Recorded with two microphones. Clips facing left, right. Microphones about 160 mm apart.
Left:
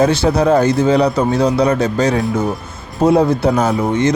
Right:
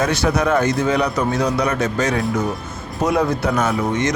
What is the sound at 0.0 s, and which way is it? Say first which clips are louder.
Speech: left 5 dB; 30° left (ahead or behind).